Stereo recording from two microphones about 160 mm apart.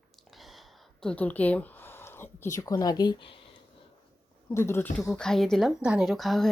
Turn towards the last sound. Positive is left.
turn(degrees=0)  # may be behind; listen again after turning